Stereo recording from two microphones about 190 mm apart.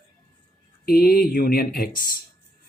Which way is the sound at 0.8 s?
50° left (ahead or behind).